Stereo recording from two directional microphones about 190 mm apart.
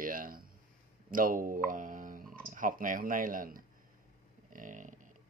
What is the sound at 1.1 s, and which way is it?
Speech, 45° right (ahead or behind).